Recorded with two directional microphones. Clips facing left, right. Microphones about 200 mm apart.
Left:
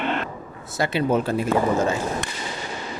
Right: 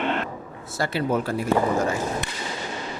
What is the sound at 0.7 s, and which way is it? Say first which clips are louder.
Speech: left 3 dB; 20° left (ahead or behind).